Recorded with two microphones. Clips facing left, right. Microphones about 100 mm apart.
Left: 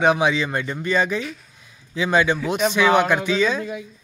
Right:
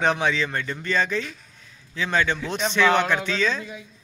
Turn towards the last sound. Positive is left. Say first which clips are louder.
# left 5 dB
turn(degrees=10)  # may be behind; listen again after turning